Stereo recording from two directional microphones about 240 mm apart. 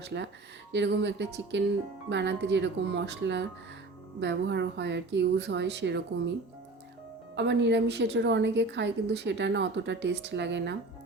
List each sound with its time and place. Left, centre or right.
0.0 s a woman's voice: right
7.3 s a woman's voice: right